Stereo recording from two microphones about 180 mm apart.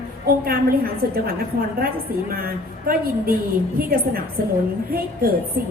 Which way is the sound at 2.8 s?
55° right (ahead or behind).